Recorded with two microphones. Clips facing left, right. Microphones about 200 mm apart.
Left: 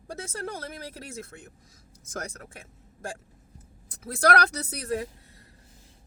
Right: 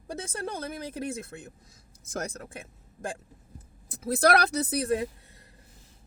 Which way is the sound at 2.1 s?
25° right (ahead or behind).